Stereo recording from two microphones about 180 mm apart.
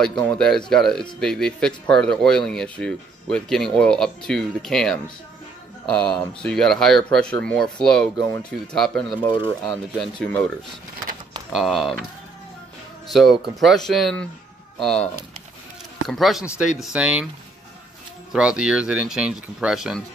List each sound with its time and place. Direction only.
0.0 s speech: 5° left (ahead or behind)
9.3 s speech: 25° left (ahead or behind)
9.9 s speech: 5° left (ahead or behind)
11.5 s speech: centre (ahead or behind)
13.1 s speech: centre (ahead or behind)
18.3 s speech: 5° right (ahead or behind)